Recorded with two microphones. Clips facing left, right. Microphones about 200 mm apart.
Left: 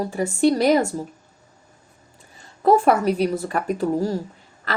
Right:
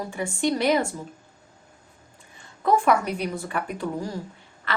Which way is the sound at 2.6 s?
35° left (ahead or behind).